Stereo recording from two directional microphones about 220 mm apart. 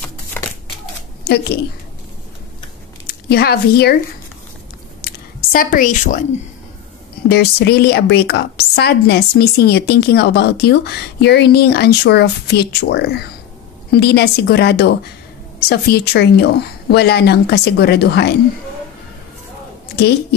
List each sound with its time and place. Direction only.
0.4 s crumpling: 10° left (ahead or behind)
3.1 s speech: 45° left (ahead or behind)
5.0 s a sound: 40° left (ahead or behind)
7.2 s a woman's voice: 50° left (ahead or behind)
20.0 s a woman's voice: 45° left (ahead or behind)